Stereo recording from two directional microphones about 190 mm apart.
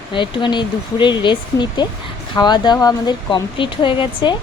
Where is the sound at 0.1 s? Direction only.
25° left (ahead or behind).